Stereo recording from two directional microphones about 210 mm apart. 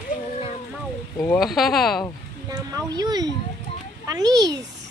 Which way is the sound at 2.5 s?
20° right (ahead or behind).